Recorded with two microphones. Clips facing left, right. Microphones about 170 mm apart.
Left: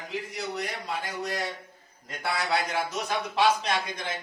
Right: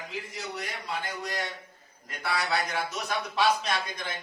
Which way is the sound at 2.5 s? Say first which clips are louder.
Left 2 dB; 25° left (ahead or behind).